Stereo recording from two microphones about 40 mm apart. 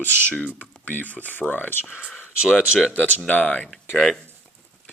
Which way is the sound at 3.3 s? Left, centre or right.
Left.